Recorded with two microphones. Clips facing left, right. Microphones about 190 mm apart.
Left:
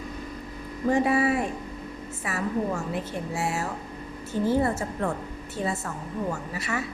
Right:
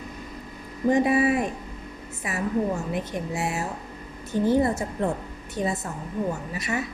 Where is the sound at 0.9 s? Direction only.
20° right (ahead or behind).